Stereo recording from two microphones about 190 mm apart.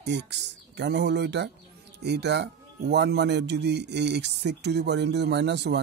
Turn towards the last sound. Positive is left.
turn(degrees=-65)  # may be behind; listen again after turning